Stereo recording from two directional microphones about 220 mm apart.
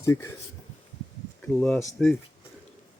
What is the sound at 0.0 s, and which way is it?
Speech, 15° left (ahead or behind).